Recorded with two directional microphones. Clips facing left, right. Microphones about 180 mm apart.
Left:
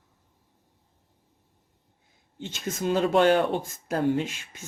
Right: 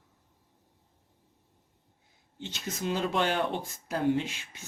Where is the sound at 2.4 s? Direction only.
50° left (ahead or behind).